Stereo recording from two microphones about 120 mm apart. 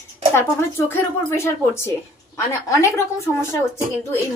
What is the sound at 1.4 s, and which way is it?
A woman's voice, 20° left (ahead or behind).